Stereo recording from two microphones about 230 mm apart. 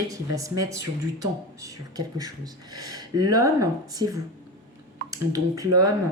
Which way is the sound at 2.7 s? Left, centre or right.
Centre.